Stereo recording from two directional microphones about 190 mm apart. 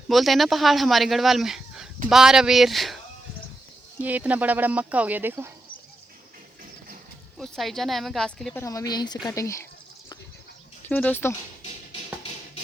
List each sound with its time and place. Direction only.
0.1 s speech: centre (ahead or behind)
4.0 s speech: 10° right (ahead or behind)
7.3 s speech: centre (ahead or behind)
8.6 s speech: 20° left (ahead or behind)
10.8 s speech: 10° left (ahead or behind)
11.6 s music: 30° left (ahead or behind)